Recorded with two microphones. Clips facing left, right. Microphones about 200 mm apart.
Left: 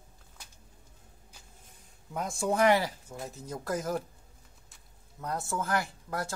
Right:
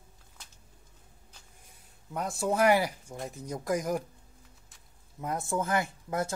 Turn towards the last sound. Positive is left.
turn(degrees=-20)  # may be behind; listen again after turning